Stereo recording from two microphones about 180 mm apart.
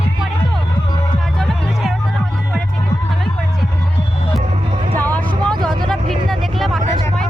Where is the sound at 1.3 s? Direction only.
Centre (ahead or behind).